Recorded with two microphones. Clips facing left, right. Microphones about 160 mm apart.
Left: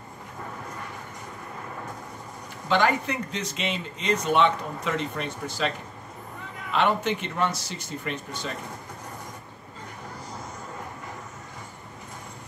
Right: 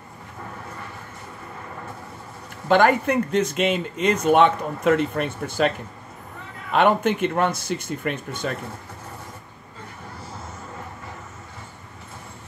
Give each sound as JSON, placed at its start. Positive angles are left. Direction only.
{"t": 2.7, "sound": "speech", "side_deg": -50}
{"t": 6.7, "sound": "speech", "side_deg": -50}